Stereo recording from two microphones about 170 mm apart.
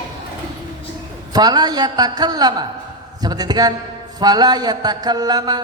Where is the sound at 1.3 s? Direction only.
25° right (ahead or behind).